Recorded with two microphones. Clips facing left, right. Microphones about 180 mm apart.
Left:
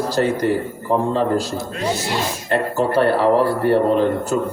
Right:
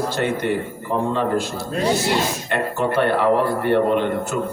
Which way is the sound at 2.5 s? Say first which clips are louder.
Left 4 dB; 35° left (ahead or behind).